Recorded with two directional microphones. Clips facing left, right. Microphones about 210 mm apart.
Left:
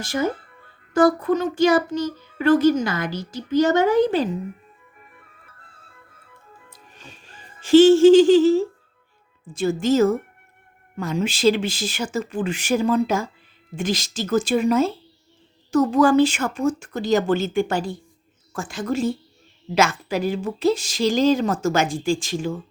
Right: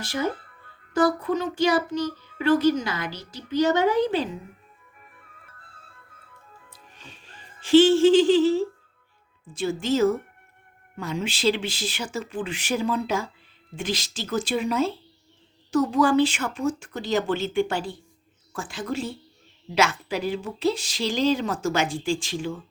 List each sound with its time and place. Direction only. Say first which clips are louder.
0.0 s a child's voice: left 4 dB; 45° left (ahead or behind)
6.7 s music: left 3 dB; 45° left (ahead or behind)
7.6 s a child's voice: left 5 dB; 45° left (ahead or behind)